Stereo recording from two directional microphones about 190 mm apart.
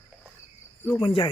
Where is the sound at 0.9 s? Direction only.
25° left (ahead or behind).